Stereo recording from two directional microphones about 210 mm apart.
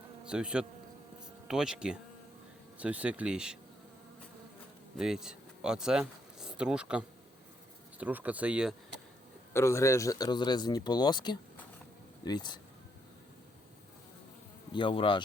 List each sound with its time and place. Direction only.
0.3 s speech: 5° right (ahead or behind)
4.9 s speech: 5° right (ahead or behind)
9.5 s a man's voice: 15° left (ahead or behind)
14.7 s a man's voice: 25° left (ahead or behind)